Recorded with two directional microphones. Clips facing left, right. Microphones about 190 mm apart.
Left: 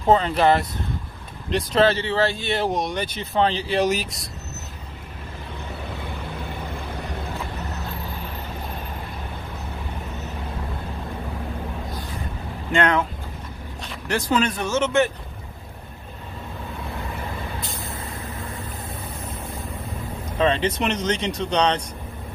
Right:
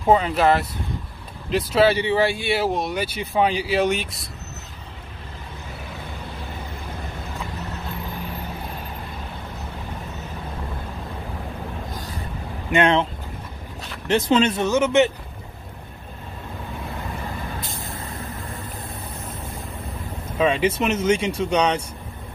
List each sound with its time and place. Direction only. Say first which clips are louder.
0.0 s speech: even; 5° right (ahead or behind)
12.7 s speech: right 2 dB; 25° right (ahead or behind)
14.0 s speech: right 4 dB; 25° right (ahead or behind)
20.3 s speech: right 1 dB; 10° right (ahead or behind)